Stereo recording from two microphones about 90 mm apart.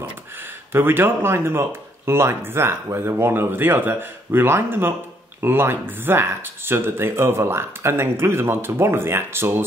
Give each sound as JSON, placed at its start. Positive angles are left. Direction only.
{"t": 0.7, "sound": "speech", "side_deg": -25}